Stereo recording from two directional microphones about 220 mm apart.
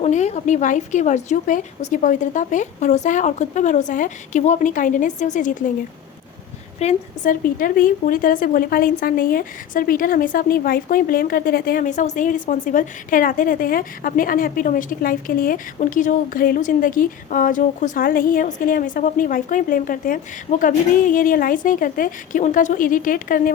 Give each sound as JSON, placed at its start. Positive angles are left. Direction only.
{"t": 0.0, "sound": "a woman's voice", "side_deg": 30}
{"t": 6.7, "sound": "a woman's voice", "side_deg": 30}